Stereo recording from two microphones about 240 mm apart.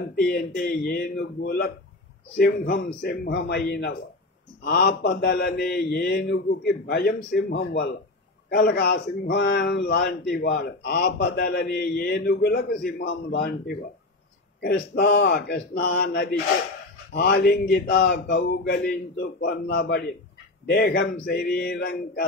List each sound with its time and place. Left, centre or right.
0.1 s a man's voice: left
14.6 s a man's voice: left